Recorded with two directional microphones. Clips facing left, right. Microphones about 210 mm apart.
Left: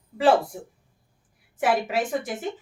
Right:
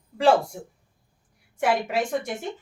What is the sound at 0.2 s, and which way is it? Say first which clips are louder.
Speech: even; 5° left (ahead or behind).